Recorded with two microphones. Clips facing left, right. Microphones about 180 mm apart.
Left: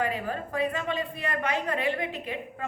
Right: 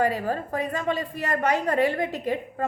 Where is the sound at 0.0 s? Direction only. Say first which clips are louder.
Right 5 dB; 40° right (ahead or behind).